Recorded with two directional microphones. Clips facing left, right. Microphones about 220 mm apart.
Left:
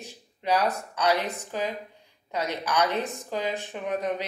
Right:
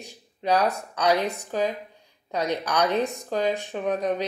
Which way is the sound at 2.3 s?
15° right (ahead or behind).